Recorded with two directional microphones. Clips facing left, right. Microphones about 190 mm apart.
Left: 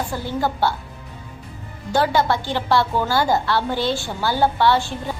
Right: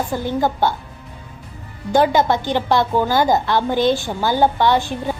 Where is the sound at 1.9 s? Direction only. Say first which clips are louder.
Right 4 dB; 20° right (ahead or behind).